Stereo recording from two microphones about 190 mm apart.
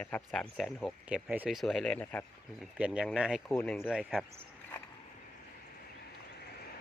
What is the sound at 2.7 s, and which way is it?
Speech, 5° right (ahead or behind).